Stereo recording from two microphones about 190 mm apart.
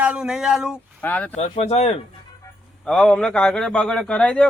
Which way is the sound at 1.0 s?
10° left (ahead or behind).